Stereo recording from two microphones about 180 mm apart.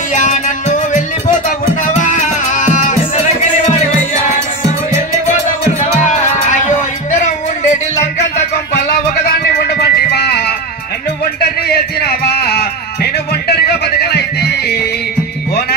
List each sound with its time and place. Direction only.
0.1 s music: 45° left (ahead or behind)
6.5 s music: 45° left (ahead or behind)
8.8 s music: 60° left (ahead or behind)
11.6 s music: 60° left (ahead or behind)